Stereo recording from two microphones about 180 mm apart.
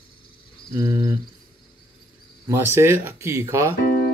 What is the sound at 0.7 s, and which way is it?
Speech, 15° right (ahead or behind).